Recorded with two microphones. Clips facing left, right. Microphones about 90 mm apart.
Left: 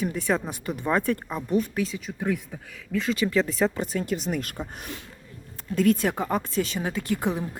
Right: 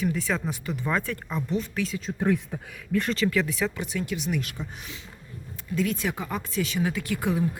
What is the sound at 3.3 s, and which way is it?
Speech, 35° left (ahead or behind).